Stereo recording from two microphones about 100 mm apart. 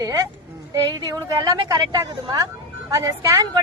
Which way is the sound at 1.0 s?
35° right (ahead or behind).